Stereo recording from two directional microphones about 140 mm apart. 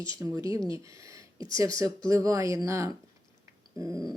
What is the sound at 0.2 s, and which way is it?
Speech, 25° right (ahead or behind).